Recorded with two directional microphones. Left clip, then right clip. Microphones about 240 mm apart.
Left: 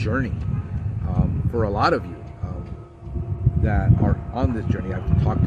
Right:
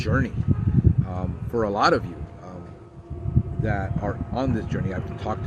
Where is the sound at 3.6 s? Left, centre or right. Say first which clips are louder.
Left 3 dB; centre.